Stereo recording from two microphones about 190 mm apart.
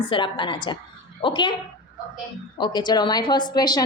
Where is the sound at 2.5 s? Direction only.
25° left (ahead or behind).